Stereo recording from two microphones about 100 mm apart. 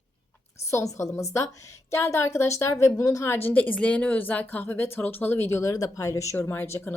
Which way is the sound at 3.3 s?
20° left (ahead or behind).